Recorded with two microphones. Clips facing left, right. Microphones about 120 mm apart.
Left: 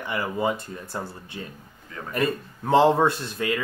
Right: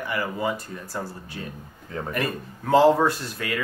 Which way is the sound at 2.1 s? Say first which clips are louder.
Left 5 dB; 25° left (ahead or behind).